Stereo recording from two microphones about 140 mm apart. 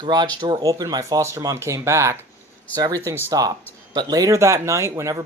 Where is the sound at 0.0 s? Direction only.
30° right (ahead or behind).